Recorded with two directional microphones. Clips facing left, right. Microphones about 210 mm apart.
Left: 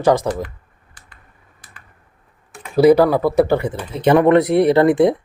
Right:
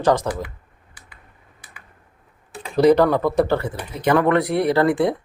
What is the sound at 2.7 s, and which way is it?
Speech, 5° left (ahead or behind).